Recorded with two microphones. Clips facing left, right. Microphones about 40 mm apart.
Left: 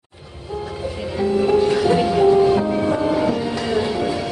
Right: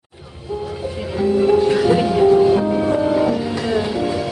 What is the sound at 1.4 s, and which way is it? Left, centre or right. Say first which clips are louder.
Music: right 2 dB; centre.